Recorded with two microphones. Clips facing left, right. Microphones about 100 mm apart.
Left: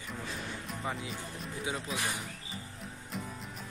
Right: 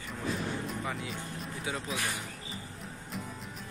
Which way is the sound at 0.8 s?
25° left (ahead or behind).